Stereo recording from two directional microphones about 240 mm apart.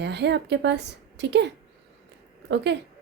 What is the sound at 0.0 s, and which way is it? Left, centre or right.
A woman's voice, right.